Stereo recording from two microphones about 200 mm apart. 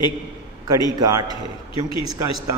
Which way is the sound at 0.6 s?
20° right (ahead or behind).